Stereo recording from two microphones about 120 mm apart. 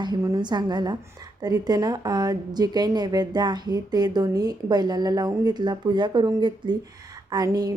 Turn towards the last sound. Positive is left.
turn(degrees=-30)  # may be behind; listen again after turning